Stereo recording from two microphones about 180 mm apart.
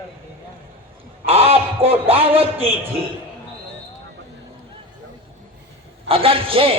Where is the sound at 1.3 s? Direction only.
35° right (ahead or behind).